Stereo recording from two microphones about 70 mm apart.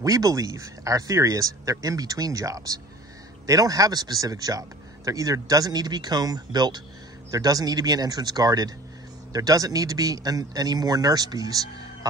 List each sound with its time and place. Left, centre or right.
0.0 s a man's voice: right
7.2 s a man's voice: right